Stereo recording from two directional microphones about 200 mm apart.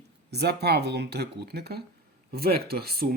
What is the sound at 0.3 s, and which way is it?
Speech, 55° right (ahead or behind).